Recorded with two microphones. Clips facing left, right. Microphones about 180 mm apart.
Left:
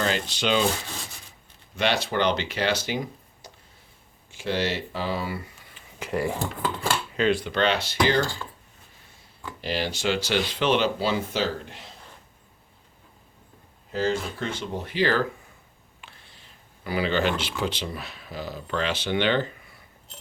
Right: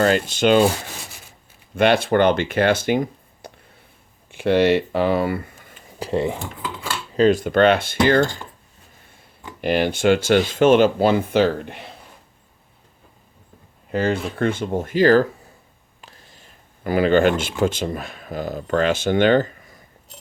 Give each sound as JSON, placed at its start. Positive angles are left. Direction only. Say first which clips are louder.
{"t": 0.0, "sound": "speech", "louder": "right 9 dB", "side_deg": -50}
{"t": 1.7, "sound": "speech", "louder": "right 9 dB", "side_deg": -55}
{"t": 6.1, "sound": "speech", "louder": "right 5 dB", "side_deg": -20}
{"t": 7.1, "sound": "speech", "louder": "right 10 dB", "side_deg": -40}
{"t": 8.2, "sound": "speech", "louder": "right 7 dB", "side_deg": -20}
{"t": 9.6, "sound": "speech", "louder": "right 9 dB", "side_deg": -55}
{"t": 13.9, "sound": "speech", "louder": "right 4 dB", "side_deg": -60}